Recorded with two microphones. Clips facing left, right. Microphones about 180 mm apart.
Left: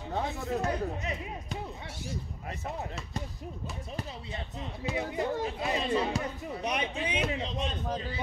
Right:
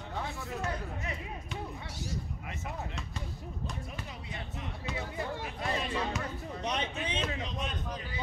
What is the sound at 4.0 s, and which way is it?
A man's voice, 30° left (ahead or behind).